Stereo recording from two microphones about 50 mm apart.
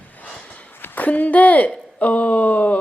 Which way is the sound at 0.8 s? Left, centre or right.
Left.